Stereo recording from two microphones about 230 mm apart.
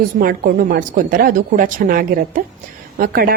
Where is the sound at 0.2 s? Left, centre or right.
Right.